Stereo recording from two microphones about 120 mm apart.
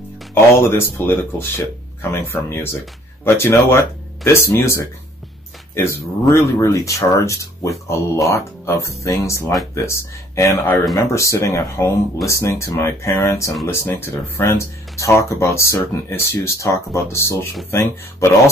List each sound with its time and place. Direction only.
0.3 s speech: 20° left (ahead or behind)